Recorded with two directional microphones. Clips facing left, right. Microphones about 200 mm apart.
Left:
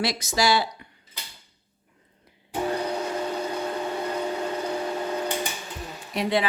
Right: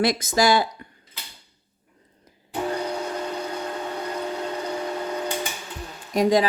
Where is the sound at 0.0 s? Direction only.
50° right (ahead or behind).